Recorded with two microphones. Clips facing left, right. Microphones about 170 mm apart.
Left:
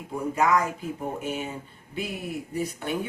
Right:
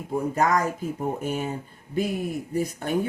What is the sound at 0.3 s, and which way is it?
Speech, 40° right (ahead or behind).